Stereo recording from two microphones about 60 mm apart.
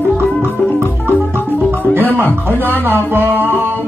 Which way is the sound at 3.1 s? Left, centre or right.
Right.